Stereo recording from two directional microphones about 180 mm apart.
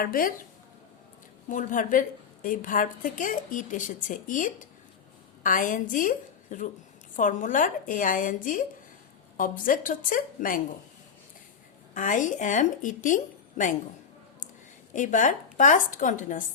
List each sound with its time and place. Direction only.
0.0 s a woman's voice: 50° left (ahead or behind)
1.5 s a woman's voice: 45° left (ahead or behind)
11.9 s a woman's voice: 45° left (ahead or behind)
14.9 s a woman's voice: 45° left (ahead or behind)